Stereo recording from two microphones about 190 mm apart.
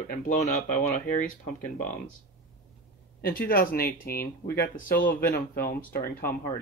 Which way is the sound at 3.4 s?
50° left (ahead or behind).